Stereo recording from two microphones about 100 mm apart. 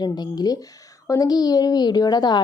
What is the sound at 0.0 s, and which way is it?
A woman's voice, 45° left (ahead or behind).